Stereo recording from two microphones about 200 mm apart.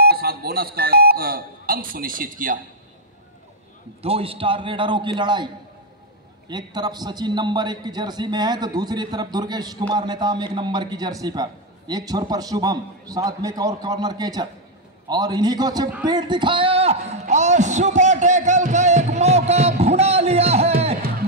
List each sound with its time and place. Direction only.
0.0 s speech: 50° right (ahead or behind)
4.0 s a man's voice: 30° right (ahead or behind)
6.5 s a man's voice: 20° right (ahead or behind)
16.0 s a sound: 20° right (ahead or behind)